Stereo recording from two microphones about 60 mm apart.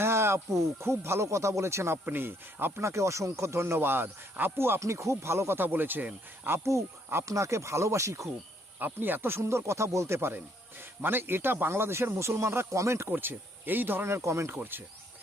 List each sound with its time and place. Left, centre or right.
0.0 s speech: right
2.0 s speech: right
2.8 s speech: right
3.8 s speech: right
4.8 s speech: right
7.3 s speech: right
8.8 s speech: right
10.2 s speech: right
13.1 s speech: right
14.6 s speech: right